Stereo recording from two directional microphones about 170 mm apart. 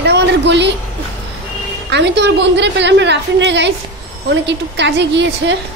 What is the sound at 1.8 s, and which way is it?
A woman's voice, 90° right.